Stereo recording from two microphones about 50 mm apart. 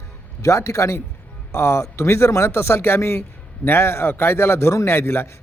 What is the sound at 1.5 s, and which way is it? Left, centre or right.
Speech, left.